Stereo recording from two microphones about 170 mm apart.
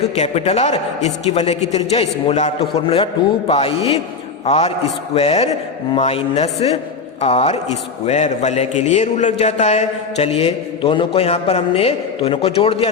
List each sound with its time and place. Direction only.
0.2 s a man's voice: 40° left (ahead or behind)